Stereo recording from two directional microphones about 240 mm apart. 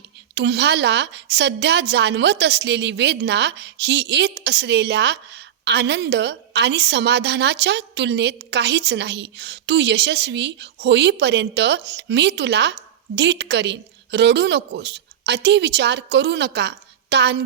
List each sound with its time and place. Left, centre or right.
0.3 s a woman's voice: right